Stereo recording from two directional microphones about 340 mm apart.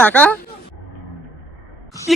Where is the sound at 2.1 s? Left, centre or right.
Centre.